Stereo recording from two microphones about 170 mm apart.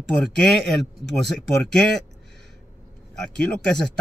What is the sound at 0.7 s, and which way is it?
Speech, 90° right.